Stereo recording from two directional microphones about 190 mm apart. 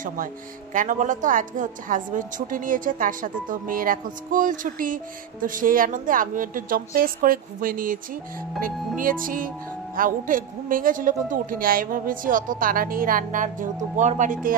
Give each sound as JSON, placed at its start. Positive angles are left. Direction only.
{"t": 0.7, "sound": "a woman's voice", "side_deg": -45}